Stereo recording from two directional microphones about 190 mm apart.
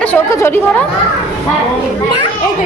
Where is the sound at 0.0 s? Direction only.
15° left (ahead or behind).